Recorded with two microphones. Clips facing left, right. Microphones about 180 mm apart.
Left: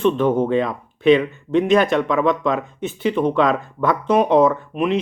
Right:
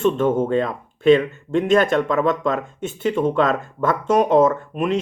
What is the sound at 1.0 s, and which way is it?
Speech, 45° right (ahead or behind).